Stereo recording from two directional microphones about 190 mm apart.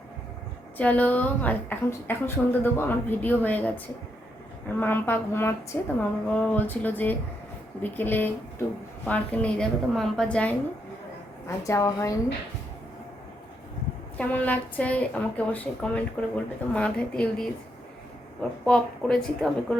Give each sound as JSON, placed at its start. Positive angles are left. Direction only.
{"t": 0.8, "sound": "a woman's voice", "side_deg": 10}
{"t": 4.8, "sound": "a woman's voice", "side_deg": 10}
{"t": 14.2, "sound": "a woman's voice", "side_deg": 10}
{"t": 18.6, "sound": "a woman's voice", "side_deg": 5}